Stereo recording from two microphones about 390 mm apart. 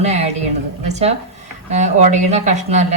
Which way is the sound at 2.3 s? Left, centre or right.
Centre.